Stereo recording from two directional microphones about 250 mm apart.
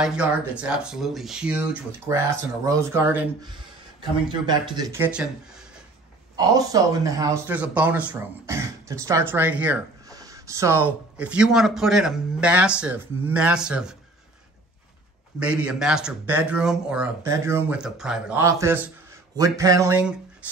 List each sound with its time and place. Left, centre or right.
0.0 s speech: centre
6.3 s speech: centre
15.3 s speech: centre